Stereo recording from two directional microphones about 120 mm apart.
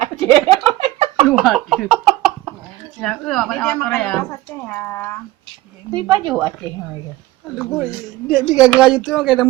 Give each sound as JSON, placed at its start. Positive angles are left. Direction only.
{"t": 0.0, "sound": "a sound", "side_deg": -55}
{"t": 1.3, "sound": "speech", "side_deg": 0}
{"t": 3.0, "sound": "speech", "side_deg": 5}
{"t": 5.9, "sound": "speech", "side_deg": -40}
{"t": 7.8, "sound": "speech", "side_deg": -10}